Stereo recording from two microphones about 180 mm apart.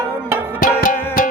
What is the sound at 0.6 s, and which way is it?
Music, 50° left (ahead or behind).